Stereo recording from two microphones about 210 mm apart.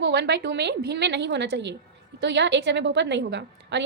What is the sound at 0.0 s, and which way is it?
A woman's voice, 55° right (ahead or behind).